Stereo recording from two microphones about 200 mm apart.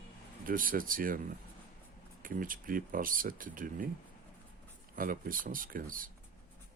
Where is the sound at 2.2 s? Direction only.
45° right (ahead or behind).